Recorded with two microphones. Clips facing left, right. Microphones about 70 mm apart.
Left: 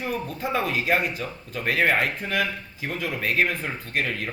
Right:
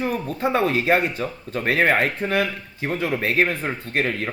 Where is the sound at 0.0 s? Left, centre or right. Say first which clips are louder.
Right 5 dB; right.